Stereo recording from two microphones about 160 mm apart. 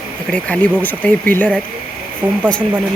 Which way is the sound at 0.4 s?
10° left (ahead or behind).